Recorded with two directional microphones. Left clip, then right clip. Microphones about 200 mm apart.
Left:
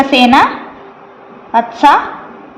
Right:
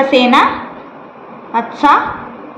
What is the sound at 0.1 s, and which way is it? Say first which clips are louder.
Speech: left 3 dB; 30° left (ahead or behind).